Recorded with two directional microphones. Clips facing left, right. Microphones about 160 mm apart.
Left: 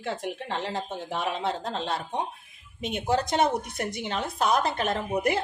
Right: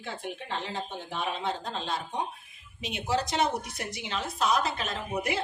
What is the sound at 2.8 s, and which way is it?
A woman's voice, 50° left (ahead or behind).